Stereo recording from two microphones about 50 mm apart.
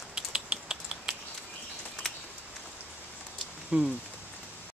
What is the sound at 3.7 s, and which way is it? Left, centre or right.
Speech, right.